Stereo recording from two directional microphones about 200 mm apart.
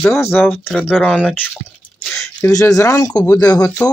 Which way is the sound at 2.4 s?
15° left (ahead or behind).